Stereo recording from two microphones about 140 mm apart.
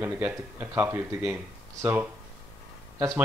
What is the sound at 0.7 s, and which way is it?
Speech, 10° right (ahead or behind).